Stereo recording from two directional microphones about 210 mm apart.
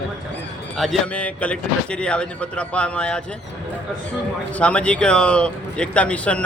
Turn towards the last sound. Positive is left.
turn(degrees=5)  # may be behind; listen again after turning